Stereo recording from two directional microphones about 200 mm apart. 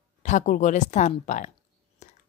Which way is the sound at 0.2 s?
35° left (ahead or behind).